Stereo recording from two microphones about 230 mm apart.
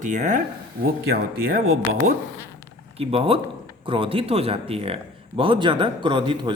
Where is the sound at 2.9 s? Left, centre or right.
Right.